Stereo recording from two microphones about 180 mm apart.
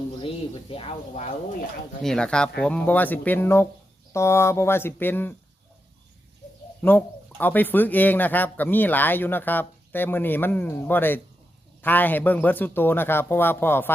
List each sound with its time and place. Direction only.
0.7 s speech: 30° left (ahead or behind)
2.0 s speech: 5° left (ahead or behind)
6.8 s speech: 10° left (ahead or behind)